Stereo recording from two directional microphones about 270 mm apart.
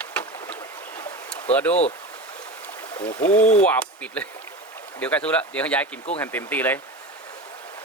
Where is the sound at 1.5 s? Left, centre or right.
Centre.